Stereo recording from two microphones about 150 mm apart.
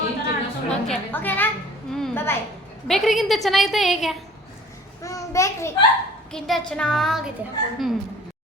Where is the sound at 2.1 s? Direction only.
15° left (ahead or behind).